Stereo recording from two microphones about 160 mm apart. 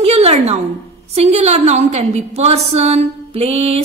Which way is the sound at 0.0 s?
40° right (ahead or behind).